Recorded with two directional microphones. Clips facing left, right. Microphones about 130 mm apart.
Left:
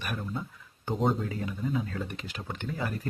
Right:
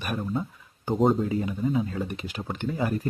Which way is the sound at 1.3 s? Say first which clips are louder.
Right 6 dB; 20° right (ahead or behind).